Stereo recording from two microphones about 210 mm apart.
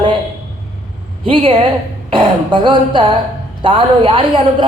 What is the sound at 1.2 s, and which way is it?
A man's voice, 25° right (ahead or behind).